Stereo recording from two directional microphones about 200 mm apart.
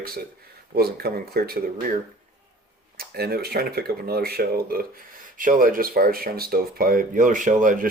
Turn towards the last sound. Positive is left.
turn(degrees=-40)  # may be behind; listen again after turning